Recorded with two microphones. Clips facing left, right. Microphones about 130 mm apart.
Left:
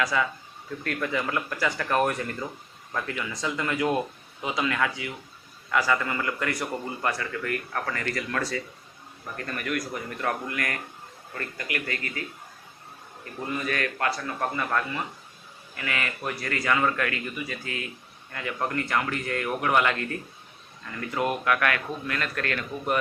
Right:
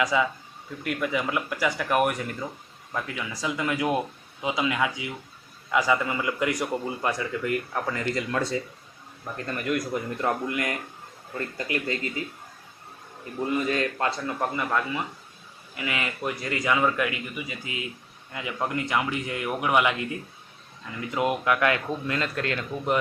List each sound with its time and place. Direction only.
0.0 s a man's voice: 15° right (ahead or behind)
13.5 s a man's voice: 20° right (ahead or behind)